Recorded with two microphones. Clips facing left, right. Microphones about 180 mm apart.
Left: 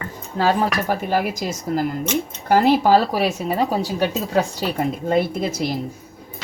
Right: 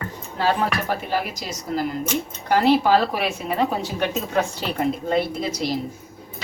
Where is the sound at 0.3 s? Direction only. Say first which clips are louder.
Left 3 dB; 40° left (ahead or behind).